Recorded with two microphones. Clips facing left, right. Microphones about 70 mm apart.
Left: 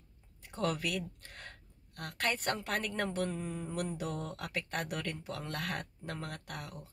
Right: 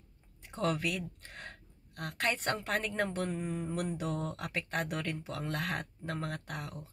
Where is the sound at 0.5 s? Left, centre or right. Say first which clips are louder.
Right 2 dB; right.